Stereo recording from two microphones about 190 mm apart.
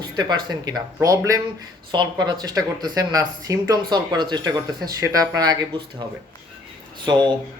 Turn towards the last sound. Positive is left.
turn(degrees=-25)  # may be behind; listen again after turning